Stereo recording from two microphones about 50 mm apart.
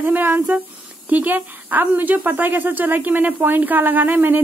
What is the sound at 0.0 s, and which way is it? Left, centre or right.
Speech, right.